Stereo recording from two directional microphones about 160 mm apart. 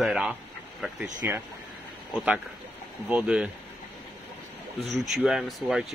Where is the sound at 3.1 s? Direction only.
10° right (ahead or behind).